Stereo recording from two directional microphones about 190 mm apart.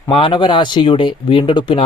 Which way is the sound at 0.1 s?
25° left (ahead or behind).